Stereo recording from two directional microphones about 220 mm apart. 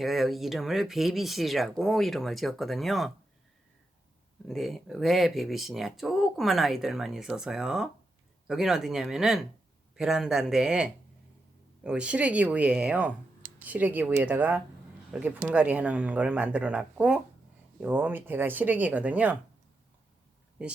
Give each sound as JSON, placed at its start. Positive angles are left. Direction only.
{"t": 0.0, "sound": "speech", "side_deg": 0}
{"t": 4.4, "sound": "speech", "side_deg": 0}